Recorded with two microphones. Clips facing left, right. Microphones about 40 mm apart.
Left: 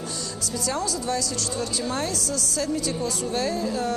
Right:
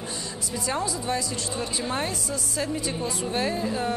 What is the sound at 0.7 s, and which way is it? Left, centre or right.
A woman's voice, right.